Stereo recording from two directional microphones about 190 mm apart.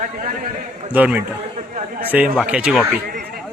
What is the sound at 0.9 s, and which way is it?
Speech, 10° right (ahead or behind).